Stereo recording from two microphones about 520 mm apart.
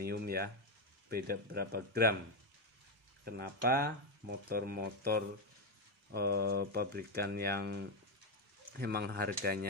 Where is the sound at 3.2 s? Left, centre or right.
Centre.